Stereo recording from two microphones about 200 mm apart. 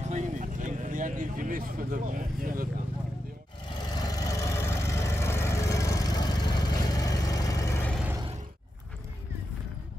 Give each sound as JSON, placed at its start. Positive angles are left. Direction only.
{"t": 0.1, "sound": "vehicle", "side_deg": -40}
{"t": 3.7, "sound": "vehicle", "side_deg": 20}
{"t": 7.9, "sound": "a sound", "side_deg": -5}